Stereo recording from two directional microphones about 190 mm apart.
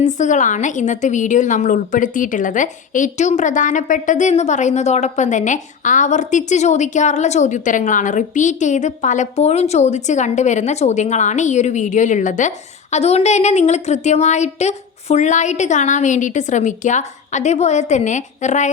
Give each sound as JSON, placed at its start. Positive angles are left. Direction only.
{"t": 0.0, "sound": "a woman's voice", "side_deg": 40}